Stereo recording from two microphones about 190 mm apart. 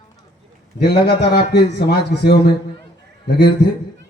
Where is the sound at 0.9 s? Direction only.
60° left (ahead or behind).